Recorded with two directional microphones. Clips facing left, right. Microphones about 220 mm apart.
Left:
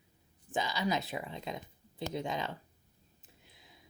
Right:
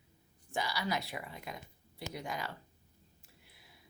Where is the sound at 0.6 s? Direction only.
20° left (ahead or behind).